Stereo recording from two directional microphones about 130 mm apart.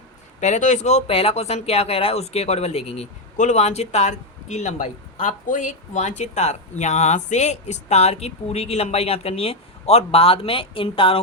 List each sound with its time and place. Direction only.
0.3 s speech: 65° left (ahead or behind); by 11.2 s 45° left (ahead or behind)